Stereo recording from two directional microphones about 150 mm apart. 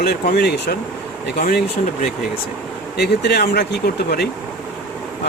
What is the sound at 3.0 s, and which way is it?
Speech, 90° left.